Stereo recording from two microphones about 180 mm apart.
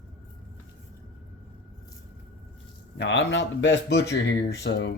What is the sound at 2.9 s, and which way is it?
Speech, 80° left.